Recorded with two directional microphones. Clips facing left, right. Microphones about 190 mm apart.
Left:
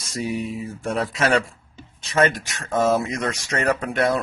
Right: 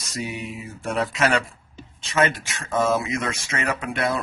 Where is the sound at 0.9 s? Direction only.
30° left (ahead or behind).